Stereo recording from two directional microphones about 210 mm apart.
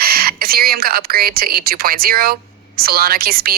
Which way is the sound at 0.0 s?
45° right (ahead or behind).